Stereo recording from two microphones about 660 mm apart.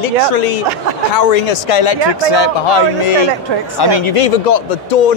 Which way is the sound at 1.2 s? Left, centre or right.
Left.